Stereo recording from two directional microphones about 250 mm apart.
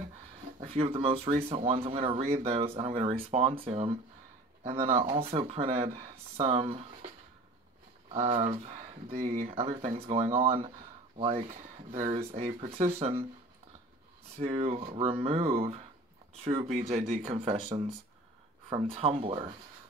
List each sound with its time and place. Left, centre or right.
0.6 s speech: right
8.1 s speech: right
14.3 s speech: right